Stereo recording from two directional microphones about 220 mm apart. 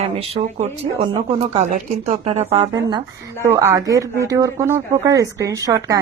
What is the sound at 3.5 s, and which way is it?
Speech, 15° right (ahead or behind).